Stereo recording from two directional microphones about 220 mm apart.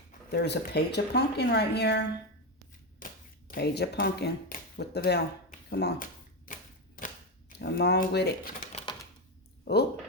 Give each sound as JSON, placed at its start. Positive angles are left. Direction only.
{"t": 0.3, "sound": "speech", "side_deg": 50}
{"t": 3.0, "sound": "clapping", "side_deg": 40}
{"t": 3.5, "sound": "a sound", "side_deg": 45}
{"t": 7.6, "sound": "speech", "side_deg": 50}